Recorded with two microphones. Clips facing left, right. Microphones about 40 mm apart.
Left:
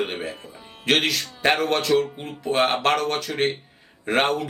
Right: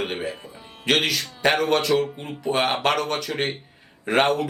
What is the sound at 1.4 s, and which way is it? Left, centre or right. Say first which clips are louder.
Speech: even; centre.